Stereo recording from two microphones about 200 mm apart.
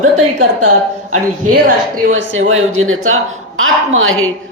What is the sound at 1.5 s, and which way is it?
Speech, 45° right (ahead or behind).